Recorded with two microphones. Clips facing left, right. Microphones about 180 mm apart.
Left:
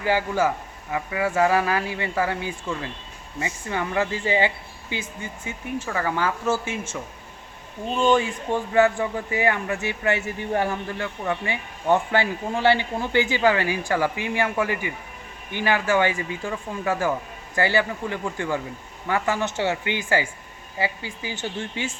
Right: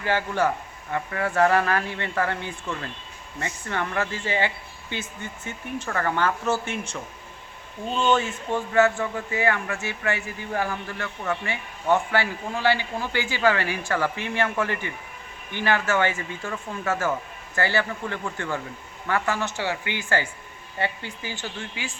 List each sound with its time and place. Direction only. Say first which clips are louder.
0.0 s a man's voice: left 2 dB; 10° left (ahead or behind)